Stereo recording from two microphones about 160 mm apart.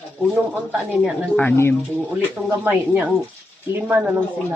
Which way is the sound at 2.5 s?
10° right (ahead or behind).